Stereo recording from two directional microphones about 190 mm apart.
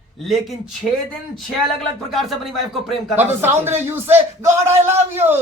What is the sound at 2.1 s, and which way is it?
Speech, centre (ahead or behind).